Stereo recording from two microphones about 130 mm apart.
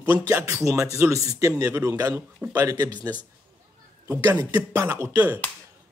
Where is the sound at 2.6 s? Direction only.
30° right (ahead or behind).